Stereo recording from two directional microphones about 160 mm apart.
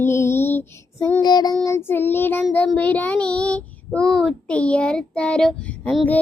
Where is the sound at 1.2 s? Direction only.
25° left (ahead or behind).